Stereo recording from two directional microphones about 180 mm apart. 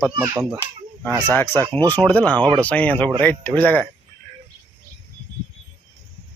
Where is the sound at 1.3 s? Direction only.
10° left (ahead or behind).